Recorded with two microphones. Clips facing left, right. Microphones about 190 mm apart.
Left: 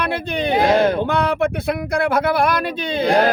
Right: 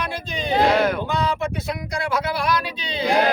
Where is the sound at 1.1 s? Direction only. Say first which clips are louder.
Left 5 dB; 60° left (ahead or behind).